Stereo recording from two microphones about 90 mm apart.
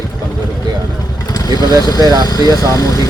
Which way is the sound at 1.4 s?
45° left (ahead or behind).